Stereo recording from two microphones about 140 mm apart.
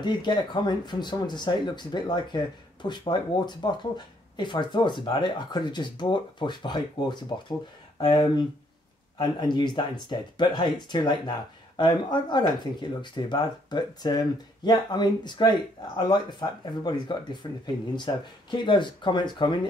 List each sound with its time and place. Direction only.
0.0 s speech: 30° left (ahead or behind)